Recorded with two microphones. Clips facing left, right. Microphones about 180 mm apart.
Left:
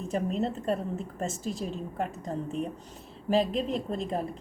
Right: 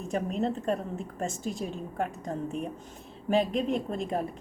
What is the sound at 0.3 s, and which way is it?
Speech, centre (ahead or behind).